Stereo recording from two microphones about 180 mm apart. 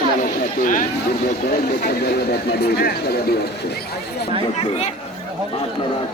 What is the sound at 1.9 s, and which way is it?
Speech, 65° left (ahead or behind).